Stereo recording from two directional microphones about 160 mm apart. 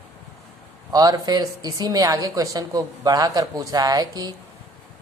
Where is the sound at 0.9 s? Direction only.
25° right (ahead or behind).